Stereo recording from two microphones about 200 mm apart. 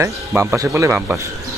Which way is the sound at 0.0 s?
15° right (ahead or behind).